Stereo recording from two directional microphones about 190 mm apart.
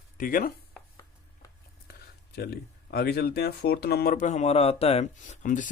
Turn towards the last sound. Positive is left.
turn(degrees=40)  # may be behind; listen again after turning